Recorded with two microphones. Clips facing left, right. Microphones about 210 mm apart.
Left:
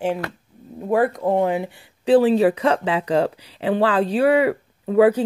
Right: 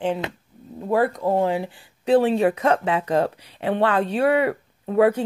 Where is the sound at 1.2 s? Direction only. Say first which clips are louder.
Left 1 dB; 20° left (ahead or behind).